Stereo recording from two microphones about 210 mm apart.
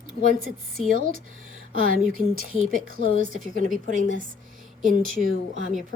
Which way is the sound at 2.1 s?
40° right (ahead or behind).